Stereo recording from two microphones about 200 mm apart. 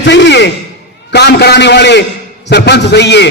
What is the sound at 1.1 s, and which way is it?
A man's voice, 55° left (ahead or behind).